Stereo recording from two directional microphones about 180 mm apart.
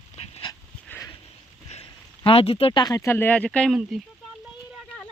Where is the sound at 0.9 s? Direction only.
15° left (ahead or behind).